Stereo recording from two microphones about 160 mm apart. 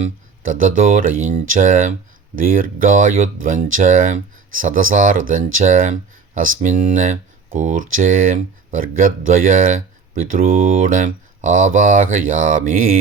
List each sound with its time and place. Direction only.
0.0 s speech: 55° right (ahead or behind)